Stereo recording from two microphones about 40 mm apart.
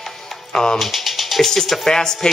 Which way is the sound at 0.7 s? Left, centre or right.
Centre.